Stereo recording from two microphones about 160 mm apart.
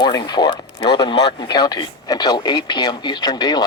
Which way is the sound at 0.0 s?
25° left (ahead or behind).